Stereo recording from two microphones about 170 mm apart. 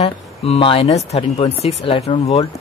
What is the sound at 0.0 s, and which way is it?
Speech, 35° left (ahead or behind).